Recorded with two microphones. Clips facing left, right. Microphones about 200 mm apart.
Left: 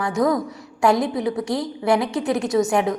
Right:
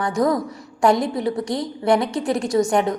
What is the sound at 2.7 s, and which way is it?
Speech, centre (ahead or behind).